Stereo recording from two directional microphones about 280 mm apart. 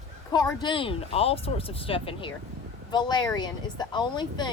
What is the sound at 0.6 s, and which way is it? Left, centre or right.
Speech, centre.